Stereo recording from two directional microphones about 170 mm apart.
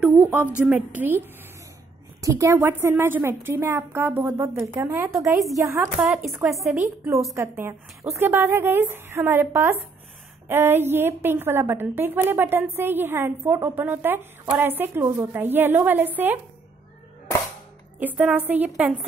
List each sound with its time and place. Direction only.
0.0 s a sound: 10° right (ahead or behind)
0.7 s a woman's voice: 10° right (ahead or behind)
2.2 s a woman's voice: 15° right (ahead or behind)
6.0 s a woman's voice: centre (ahead or behind)
17.9 s a woman's voice: 10° right (ahead or behind)